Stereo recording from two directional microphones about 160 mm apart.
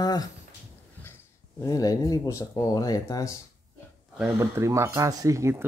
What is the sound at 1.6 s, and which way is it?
Speech, 20° left (ahead or behind).